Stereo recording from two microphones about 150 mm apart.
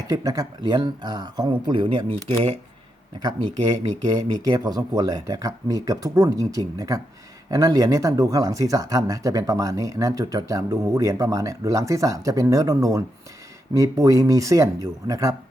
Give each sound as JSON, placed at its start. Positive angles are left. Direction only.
{"t": 0.1, "sound": "speech", "side_deg": -25}